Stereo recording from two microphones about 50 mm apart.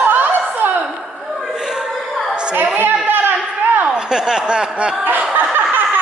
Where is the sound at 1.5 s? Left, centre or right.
Centre.